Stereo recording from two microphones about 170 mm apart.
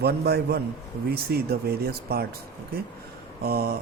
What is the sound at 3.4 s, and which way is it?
Speech, 65° right (ahead or behind).